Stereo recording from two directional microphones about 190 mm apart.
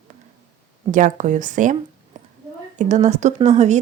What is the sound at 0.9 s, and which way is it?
Speech, 40° right (ahead or behind).